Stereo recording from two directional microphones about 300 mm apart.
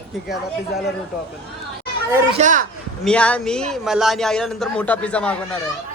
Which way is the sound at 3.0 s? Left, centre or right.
Centre.